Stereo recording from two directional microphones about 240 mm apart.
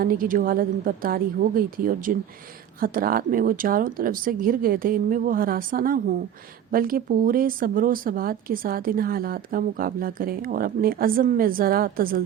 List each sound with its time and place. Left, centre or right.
0.0 s speech: right